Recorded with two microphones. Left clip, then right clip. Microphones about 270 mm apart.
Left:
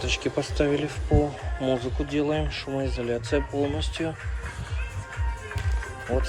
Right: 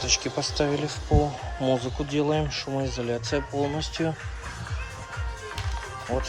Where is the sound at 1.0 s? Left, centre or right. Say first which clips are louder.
Right 1 dB; right.